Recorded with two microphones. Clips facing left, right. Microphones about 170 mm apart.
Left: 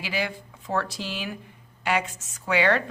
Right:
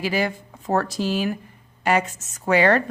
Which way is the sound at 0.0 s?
45° right (ahead or behind).